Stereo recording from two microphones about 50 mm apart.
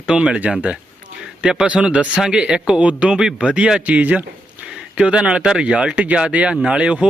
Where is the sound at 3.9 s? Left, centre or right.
Right.